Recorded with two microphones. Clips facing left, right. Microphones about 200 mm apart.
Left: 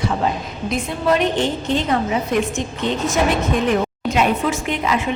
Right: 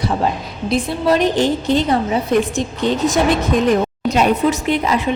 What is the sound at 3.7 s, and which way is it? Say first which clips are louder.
A woman's voice: right 3 dB; 40° right (ahead or behind).